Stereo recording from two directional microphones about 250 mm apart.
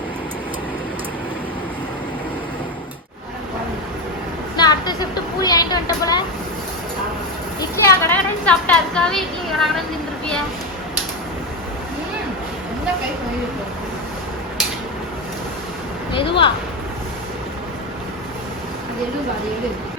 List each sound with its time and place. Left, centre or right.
4.5 s a woman's voice: centre
7.6 s a woman's voice: centre
16.1 s speech: centre